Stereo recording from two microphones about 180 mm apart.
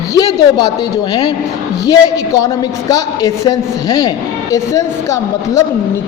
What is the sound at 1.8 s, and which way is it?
A woman's voice, 20° left (ahead or behind).